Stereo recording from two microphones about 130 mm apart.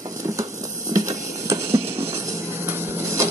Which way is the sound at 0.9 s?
25° right (ahead or behind).